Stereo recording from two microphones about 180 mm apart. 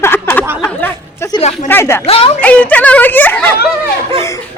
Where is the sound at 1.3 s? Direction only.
35° left (ahead or behind).